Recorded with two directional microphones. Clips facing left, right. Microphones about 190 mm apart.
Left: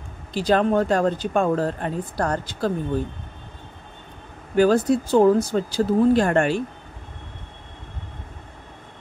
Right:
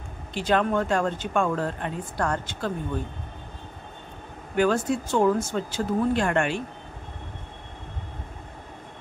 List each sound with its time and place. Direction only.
0.3 s speech: 35° left (ahead or behind)
4.6 s speech: 35° left (ahead or behind)